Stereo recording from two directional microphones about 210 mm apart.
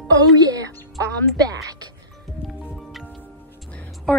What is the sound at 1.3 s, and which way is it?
Speech, 15° right (ahead or behind).